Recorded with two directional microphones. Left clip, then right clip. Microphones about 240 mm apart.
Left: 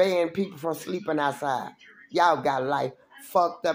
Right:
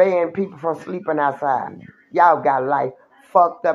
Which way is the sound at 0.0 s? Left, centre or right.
Centre.